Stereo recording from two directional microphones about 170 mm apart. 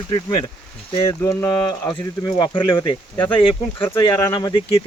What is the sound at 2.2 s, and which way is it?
Speech, 25° left (ahead or behind).